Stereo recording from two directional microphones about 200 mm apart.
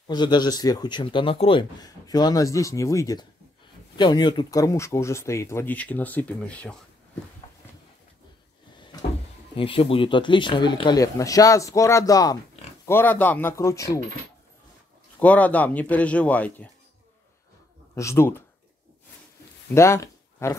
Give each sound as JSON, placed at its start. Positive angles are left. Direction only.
{"t": 0.1, "sound": "speech", "side_deg": 20}
{"t": 9.6, "sound": "speech", "side_deg": 25}
{"t": 15.1, "sound": "speech", "side_deg": 5}
{"t": 17.9, "sound": "speech", "side_deg": 15}
{"t": 19.7, "sound": "speech", "side_deg": 15}